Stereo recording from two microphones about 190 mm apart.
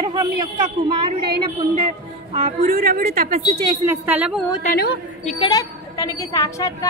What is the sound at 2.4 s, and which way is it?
Speech, 50° right (ahead or behind).